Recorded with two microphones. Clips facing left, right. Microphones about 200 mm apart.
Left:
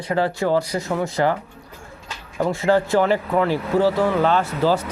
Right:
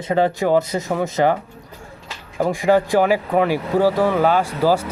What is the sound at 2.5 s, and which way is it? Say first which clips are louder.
Speech: right 2 dB; 15° right (ahead or behind).